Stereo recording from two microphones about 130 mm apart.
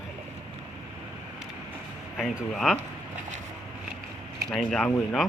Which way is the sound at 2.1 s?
Centre (ahead or behind).